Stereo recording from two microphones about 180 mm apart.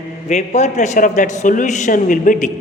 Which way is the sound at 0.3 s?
40° left (ahead or behind).